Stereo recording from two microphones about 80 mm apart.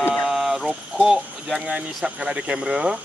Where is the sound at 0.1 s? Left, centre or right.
Centre.